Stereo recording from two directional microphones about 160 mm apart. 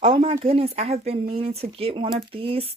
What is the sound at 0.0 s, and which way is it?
Speech, 35° right (ahead or behind).